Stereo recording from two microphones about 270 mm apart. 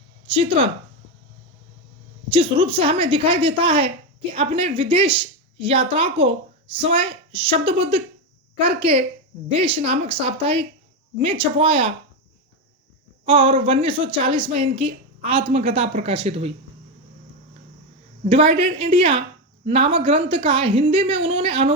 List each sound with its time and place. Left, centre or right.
0.3 s a woman's voice: centre
2.3 s a woman's voice: centre
13.2 s a woman's voice: centre
18.3 s a woman's voice: centre